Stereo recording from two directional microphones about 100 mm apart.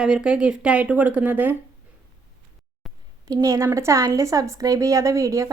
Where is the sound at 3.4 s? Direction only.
30° right (ahead or behind).